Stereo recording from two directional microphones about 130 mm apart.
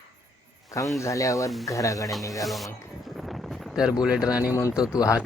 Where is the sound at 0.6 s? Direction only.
25° left (ahead or behind).